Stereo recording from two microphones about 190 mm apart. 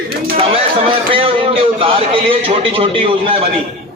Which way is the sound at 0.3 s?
30° right (ahead or behind).